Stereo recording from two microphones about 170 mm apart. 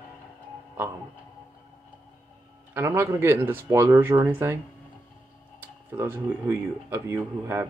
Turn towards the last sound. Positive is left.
turn(degrees=-15)  # may be behind; listen again after turning